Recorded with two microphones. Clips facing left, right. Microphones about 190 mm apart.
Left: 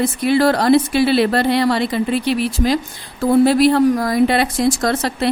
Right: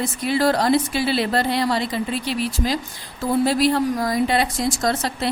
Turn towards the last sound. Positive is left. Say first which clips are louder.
# left 4 dB
turn(degrees=65)  # may be behind; listen again after turning